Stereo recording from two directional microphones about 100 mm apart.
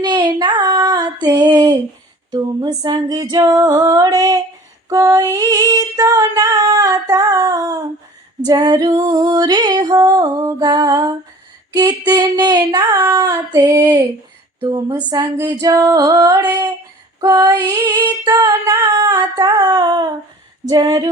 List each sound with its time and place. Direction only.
0.0 s female singing: 45° right (ahead or behind)
2.3 s music: 45° right (ahead or behind)
15.1 s music: 40° right (ahead or behind)